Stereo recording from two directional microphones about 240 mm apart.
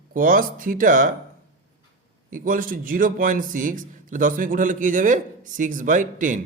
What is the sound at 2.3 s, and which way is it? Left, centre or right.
A man's voice, right.